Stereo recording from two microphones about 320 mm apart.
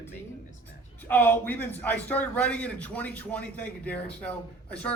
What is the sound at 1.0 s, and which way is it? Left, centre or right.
A man's voice, centre.